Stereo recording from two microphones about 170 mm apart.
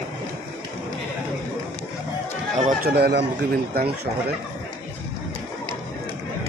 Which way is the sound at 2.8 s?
65° right (ahead or behind).